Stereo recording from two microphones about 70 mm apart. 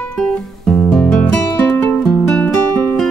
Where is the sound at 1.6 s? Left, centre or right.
Left.